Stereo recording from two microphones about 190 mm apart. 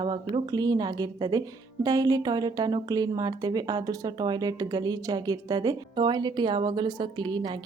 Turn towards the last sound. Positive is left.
turn(degrees=-25)  # may be behind; listen again after turning